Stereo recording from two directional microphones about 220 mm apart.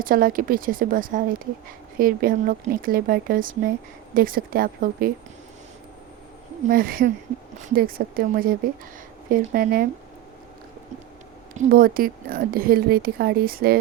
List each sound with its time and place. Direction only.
0.0 s speech: 40° right (ahead or behind)
6.7 s speech: 40° right (ahead or behind)
11.5 s speech: 35° right (ahead or behind)